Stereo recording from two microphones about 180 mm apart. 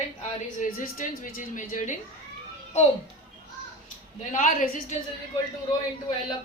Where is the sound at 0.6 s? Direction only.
45° left (ahead or behind).